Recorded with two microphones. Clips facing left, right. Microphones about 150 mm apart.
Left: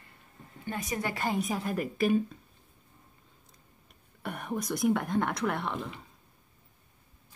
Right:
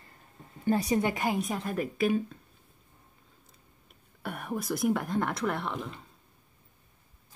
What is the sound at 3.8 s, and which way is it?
Speech, centre (ahead or behind).